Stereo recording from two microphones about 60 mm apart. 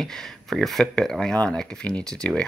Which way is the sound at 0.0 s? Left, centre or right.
Centre.